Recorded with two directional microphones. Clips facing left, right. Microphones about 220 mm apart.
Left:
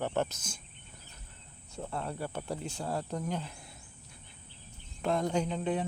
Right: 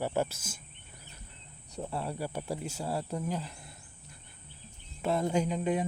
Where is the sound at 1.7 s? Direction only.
15° right (ahead or behind).